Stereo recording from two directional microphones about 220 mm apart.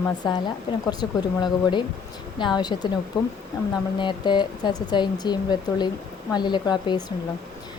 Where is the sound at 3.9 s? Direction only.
20° left (ahead or behind).